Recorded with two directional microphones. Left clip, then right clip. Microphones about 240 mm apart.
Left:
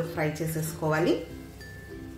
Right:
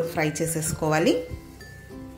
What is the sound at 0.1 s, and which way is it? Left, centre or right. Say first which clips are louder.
Speech: right 4 dB; right.